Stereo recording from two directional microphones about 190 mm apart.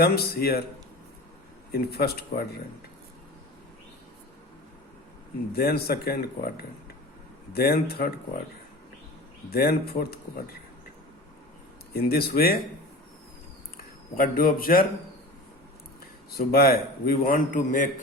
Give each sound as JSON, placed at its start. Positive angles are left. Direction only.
{"t": 0.0, "sound": "a man's voice", "side_deg": 55}
{"t": 1.7, "sound": "speech", "side_deg": 55}
{"t": 5.5, "sound": "speech", "side_deg": 55}
{"t": 7.5, "sound": "speech", "side_deg": 55}
{"t": 9.5, "sound": "a man's voice", "side_deg": 55}
{"t": 11.9, "sound": "a man's voice", "side_deg": 55}
{"t": 14.2, "sound": "a man's voice", "side_deg": 50}
{"t": 16.3, "sound": "a man's voice", "side_deg": 55}